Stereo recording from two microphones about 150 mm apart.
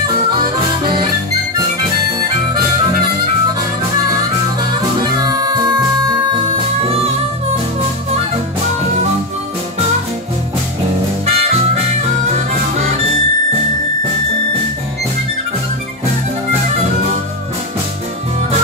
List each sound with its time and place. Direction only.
5.2 s music: 25° right (ahead or behind)
11.2 s music: 45° right (ahead or behind)